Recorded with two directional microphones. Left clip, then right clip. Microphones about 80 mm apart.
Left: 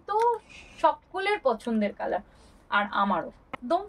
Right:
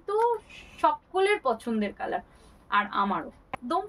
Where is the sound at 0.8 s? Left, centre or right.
Right.